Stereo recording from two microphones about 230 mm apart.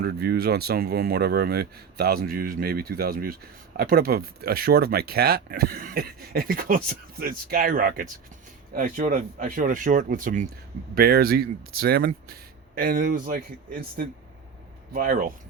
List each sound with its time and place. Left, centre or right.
0.0 s speech: right